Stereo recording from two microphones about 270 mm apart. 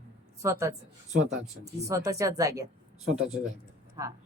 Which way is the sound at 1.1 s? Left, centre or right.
Right.